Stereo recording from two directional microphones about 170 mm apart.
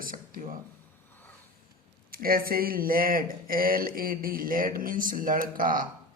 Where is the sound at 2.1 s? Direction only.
60° right (ahead or behind).